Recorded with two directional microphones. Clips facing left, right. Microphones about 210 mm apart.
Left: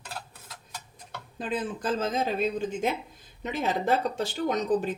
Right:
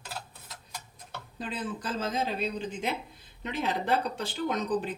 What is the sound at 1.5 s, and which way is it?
Speech, 50° left (ahead or behind).